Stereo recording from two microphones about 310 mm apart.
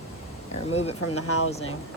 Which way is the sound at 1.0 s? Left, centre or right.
Left.